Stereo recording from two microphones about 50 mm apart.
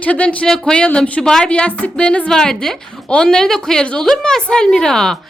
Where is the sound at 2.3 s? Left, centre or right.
Centre.